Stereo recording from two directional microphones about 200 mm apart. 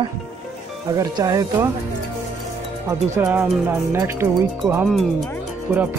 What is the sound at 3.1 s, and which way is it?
Speech, 10° right (ahead or behind).